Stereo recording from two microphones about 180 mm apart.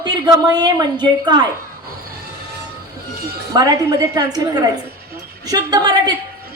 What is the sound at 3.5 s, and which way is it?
A woman's voice, 20° right (ahead or behind).